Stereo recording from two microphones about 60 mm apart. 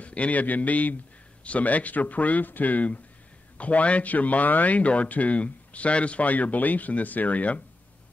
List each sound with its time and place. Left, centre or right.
0.0 s speech: left